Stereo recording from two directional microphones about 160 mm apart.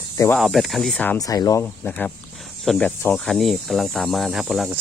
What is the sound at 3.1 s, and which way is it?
Speech, centre (ahead or behind).